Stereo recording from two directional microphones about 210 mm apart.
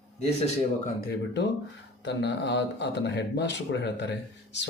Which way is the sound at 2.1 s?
55° left (ahead or behind).